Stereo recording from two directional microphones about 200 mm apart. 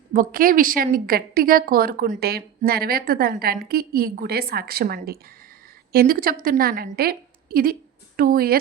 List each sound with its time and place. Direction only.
0.1 s a woman's voice: 45° right (ahead or behind)